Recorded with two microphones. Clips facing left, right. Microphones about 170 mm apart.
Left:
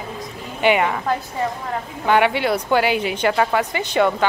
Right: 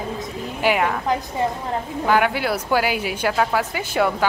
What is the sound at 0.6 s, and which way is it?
Speech, centre (ahead or behind).